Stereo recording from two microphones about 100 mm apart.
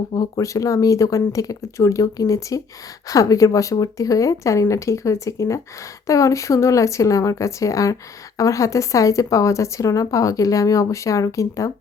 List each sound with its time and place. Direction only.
0.1 s speech: 35° left (ahead or behind)